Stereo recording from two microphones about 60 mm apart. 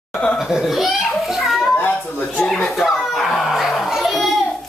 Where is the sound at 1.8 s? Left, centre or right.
Left.